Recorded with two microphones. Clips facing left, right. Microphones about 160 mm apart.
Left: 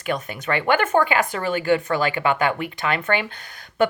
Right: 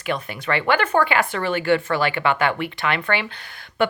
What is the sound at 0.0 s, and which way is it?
A woman's voice, 45° left (ahead or behind).